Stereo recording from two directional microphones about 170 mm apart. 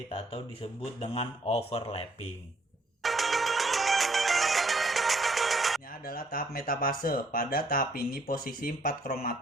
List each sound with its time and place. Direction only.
0.1 s speech: 35° left (ahead or behind)
3.0 s music: centre (ahead or behind)
6.1 s speech: 60° left (ahead or behind)